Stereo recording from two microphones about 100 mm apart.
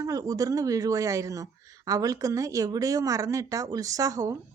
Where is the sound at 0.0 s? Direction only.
35° right (ahead or behind).